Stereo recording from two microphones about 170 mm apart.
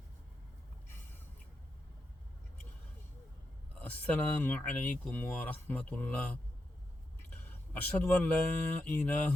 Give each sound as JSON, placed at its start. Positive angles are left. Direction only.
{"t": 3.8, "sound": "speech", "side_deg": 10}
{"t": 7.3, "sound": "a sound", "side_deg": 10}
{"t": 8.8, "sound": "speech", "side_deg": 10}